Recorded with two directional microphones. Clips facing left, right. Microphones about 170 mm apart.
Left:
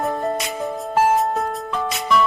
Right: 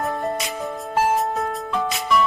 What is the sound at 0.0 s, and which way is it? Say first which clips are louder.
Music: left 2 dB; centre (ahead or behind).